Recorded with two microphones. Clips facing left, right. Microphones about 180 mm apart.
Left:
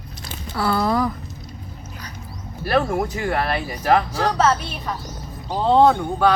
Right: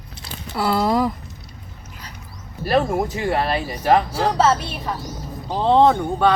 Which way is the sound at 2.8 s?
20° right (ahead or behind).